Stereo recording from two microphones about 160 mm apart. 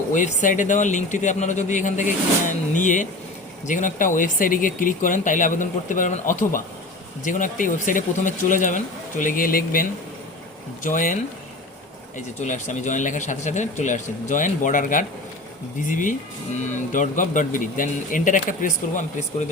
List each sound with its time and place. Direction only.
0.1 s speech: 55° left (ahead or behind)
10.8 s speech: 55° left (ahead or behind)